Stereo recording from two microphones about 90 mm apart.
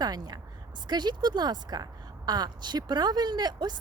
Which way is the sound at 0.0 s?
45° right (ahead or behind).